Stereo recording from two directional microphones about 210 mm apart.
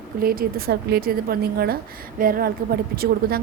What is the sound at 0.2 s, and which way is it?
A woman's voice, 45° right (ahead or behind).